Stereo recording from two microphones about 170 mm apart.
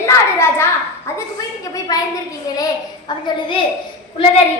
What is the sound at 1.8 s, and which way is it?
A woman's voice, 20° left (ahead or behind).